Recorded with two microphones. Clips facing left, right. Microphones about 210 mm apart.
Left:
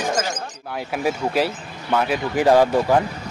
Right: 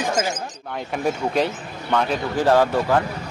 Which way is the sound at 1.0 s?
5° left (ahead or behind).